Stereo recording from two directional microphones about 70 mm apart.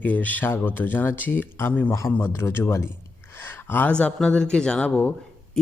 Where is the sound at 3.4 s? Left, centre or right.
Left.